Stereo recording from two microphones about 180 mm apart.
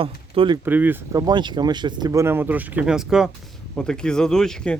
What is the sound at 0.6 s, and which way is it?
Speech, 10° right (ahead or behind).